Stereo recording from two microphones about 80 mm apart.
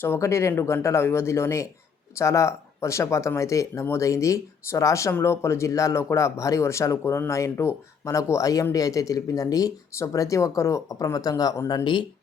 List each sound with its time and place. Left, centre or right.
0.0 s speech: left